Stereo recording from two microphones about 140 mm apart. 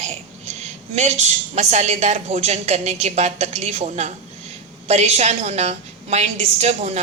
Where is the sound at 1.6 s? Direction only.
55° right (ahead or behind).